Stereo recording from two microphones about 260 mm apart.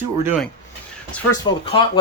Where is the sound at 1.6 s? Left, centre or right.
Centre.